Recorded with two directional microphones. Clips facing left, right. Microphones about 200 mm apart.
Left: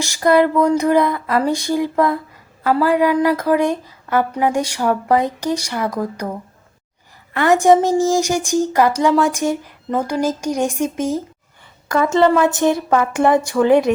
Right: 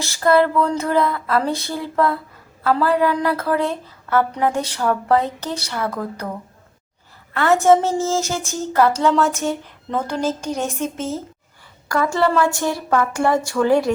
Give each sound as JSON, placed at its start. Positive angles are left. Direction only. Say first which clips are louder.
{"t": 0.0, "sound": "a woman's voice", "louder": "left 2 dB", "side_deg": 15}
{"t": 7.3, "sound": "a woman's voice", "louder": "left 2 dB", "side_deg": 15}